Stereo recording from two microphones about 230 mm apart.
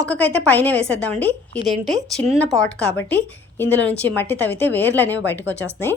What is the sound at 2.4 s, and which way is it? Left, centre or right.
A woman's voice, centre.